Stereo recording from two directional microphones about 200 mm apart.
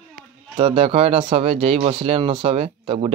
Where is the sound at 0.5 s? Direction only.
30° right (ahead or behind).